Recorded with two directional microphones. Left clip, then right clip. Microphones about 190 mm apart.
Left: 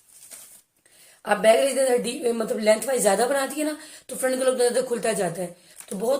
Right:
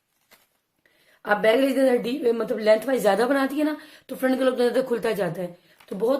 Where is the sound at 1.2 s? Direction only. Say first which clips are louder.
Left 2 dB; 45° right (ahead or behind).